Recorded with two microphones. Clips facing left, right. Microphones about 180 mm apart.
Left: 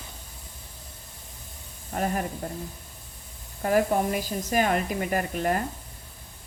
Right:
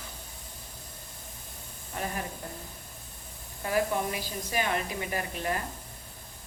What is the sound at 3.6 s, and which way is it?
A woman's voice, 45° left (ahead or behind).